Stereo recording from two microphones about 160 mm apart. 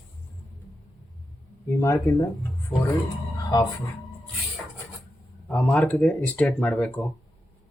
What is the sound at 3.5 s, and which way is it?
Speech, 25° left (ahead or behind).